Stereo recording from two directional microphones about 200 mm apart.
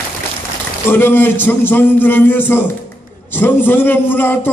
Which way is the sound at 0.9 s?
10° left (ahead or behind).